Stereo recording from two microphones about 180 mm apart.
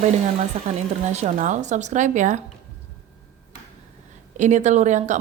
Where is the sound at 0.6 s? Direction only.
40° right (ahead or behind).